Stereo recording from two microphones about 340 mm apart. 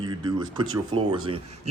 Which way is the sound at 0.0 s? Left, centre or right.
Centre.